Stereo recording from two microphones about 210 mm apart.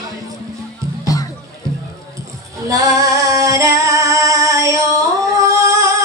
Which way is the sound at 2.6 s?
15° right (ahead or behind).